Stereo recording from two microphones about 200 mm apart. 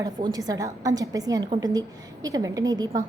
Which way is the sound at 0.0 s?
20° right (ahead or behind).